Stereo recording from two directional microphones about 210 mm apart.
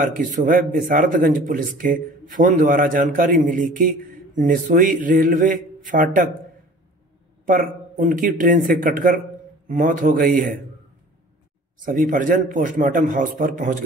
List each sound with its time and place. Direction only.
0.1 s speech: 40° right (ahead or behind)
7.4 s speech: 40° right (ahead or behind)
11.8 s speech: 40° right (ahead or behind)